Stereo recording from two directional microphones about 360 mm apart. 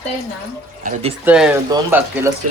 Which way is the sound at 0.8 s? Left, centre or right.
Right.